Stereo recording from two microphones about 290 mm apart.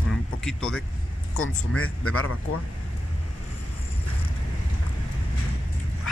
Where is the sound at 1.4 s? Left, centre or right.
Left.